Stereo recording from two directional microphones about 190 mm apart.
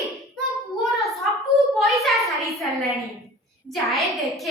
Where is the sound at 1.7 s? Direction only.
Centre (ahead or behind).